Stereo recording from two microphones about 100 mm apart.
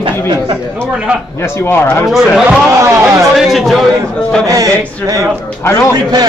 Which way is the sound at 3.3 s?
Centre (ahead or behind).